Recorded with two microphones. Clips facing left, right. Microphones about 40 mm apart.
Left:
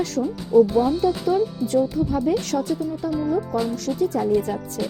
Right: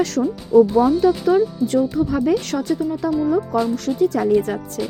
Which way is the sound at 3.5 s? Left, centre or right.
Right.